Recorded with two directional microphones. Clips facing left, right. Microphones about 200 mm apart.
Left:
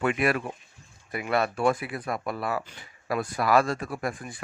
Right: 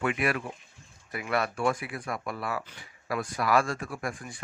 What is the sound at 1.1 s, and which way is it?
Speech, 25° left (ahead or behind).